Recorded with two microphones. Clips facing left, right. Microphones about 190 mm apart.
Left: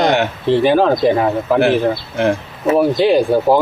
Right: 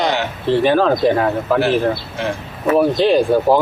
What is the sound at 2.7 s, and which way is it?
Speech, 10° left (ahead or behind).